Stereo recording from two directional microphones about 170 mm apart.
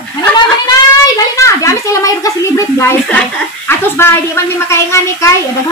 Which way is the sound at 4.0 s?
15° left (ahead or behind).